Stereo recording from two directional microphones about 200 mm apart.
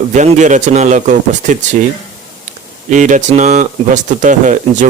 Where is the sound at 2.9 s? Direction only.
40° right (ahead or behind).